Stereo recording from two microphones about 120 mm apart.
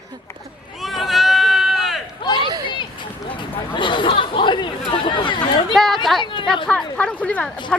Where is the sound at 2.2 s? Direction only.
40° left (ahead or behind).